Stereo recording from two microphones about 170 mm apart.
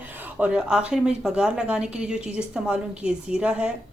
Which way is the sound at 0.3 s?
5° right (ahead or behind).